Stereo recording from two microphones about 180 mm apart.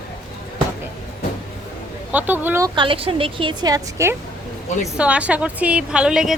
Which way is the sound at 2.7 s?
30° right (ahead or behind).